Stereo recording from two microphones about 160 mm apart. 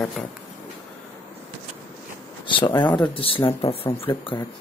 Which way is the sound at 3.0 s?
35° left (ahead or behind).